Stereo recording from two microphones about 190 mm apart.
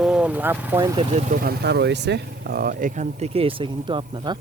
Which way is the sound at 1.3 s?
50° right (ahead or behind).